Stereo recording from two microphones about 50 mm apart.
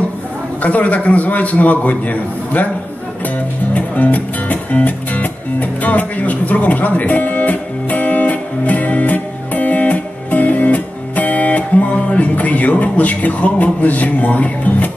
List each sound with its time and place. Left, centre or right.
0.6 s a man's voice: left
3.7 s music: left